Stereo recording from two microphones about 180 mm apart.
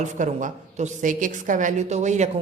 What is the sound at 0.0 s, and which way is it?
A woman's voice, 45° right (ahead or behind).